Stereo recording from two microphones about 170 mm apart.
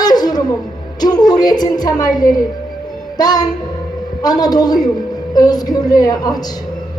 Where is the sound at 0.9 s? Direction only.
25° left (ahead or behind).